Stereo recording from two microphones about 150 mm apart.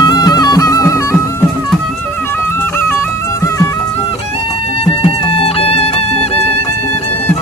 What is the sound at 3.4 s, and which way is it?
Music, 20° left (ahead or behind).